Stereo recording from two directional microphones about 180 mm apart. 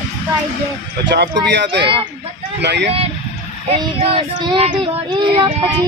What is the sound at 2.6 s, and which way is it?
Speech, 70° right (ahead or behind).